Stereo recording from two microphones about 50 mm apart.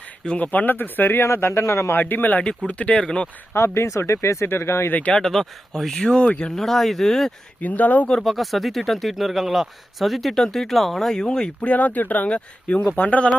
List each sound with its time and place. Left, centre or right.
0.3 s speech: left
1.2 s speech: left
1.9 s speech: left
2.6 s speech: left
3.5 s speech: left
4.4 s speech: left
4.9 s speech: left
5.1 s speech: centre
6.6 s speech: centre
7.6 s speech: left
8.2 s speech: centre
11.6 s speech: left